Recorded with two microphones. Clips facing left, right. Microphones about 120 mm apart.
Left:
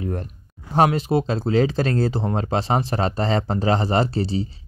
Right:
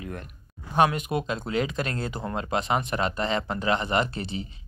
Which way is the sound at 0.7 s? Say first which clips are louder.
Left 5 dB; 30° left (ahead or behind).